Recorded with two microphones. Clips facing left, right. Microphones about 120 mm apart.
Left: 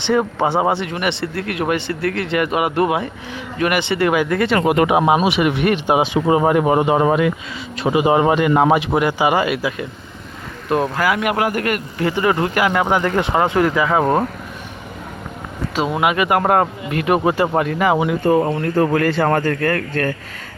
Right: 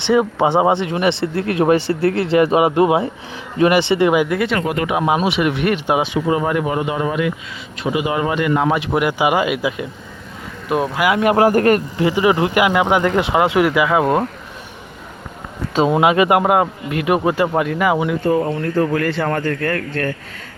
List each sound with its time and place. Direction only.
0.1 s speech: 10° right (ahead or behind)
0.4 s speech: 20° right (ahead or behind)
4.8 s speech: 20° left (ahead or behind)
5.0 s speech: 5° left (ahead or behind)
6.1 s speech: 25° left (ahead or behind)
8.7 s speech: 5° left (ahead or behind)
9.0 s speech: 10° right (ahead or behind)
11.1 s speech: 30° right (ahead or behind)
11.9 s speech: 15° right (ahead or behind)
15.8 s speech: 25° right (ahead or behind)
16.4 s speech: 5° right (ahead or behind)
17.9 s speech: 10° left (ahead or behind)
19.0 s speech: 40° left (ahead or behind)
19.5 s speech: 70° left (ahead or behind)